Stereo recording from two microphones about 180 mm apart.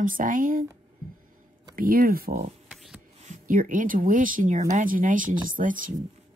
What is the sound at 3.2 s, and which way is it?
Speech, 45° right (ahead or behind).